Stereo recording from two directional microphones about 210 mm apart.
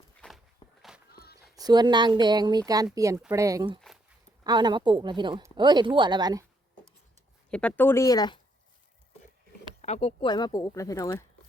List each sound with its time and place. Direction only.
0.2 s walk: 5° left (ahead or behind)
0.8 s a sound: centre (ahead or behind)
1.1 s a sound: 45° left (ahead or behind)
1.5 s speech: 20° right (ahead or behind)
7.5 s speech: 5° left (ahead or behind)
9.8 s speech: 30° left (ahead or behind); by 11.2 s 15° left (ahead or behind)